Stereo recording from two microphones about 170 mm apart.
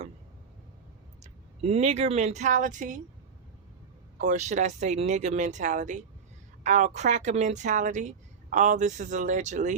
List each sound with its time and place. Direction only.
1.2 s speech: 40° right (ahead or behind)
4.2 s speech: 45° right (ahead or behind)